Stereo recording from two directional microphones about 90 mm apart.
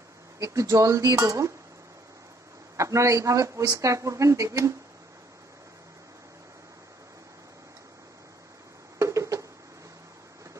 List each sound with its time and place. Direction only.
0.4 s speech: 35° right (ahead or behind)
2.8 s speech: 35° right (ahead or behind)
8.9 s a sound: 35° right (ahead or behind)